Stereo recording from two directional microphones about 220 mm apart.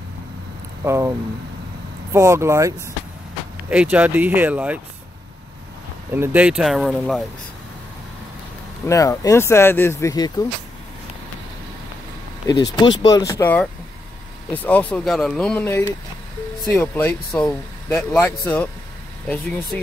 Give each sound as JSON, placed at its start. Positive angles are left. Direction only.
{"t": 0.8, "sound": "speech", "side_deg": -10}
{"t": 2.1, "sound": "speech", "side_deg": -10}
{"t": 6.1, "sound": "speech", "side_deg": -10}
{"t": 8.8, "sound": "speech", "side_deg": 15}
{"t": 12.7, "sound": "speech", "side_deg": 20}